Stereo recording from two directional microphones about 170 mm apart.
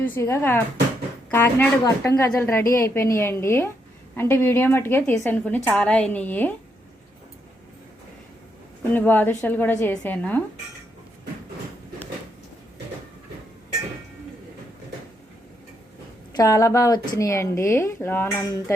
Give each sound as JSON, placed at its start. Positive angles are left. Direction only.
{"t": 0.0, "sound": "a woman's voice", "side_deg": 15}
{"t": 8.9, "sound": "a woman's voice", "side_deg": 10}
{"t": 16.3, "sound": "a woman's voice", "side_deg": 20}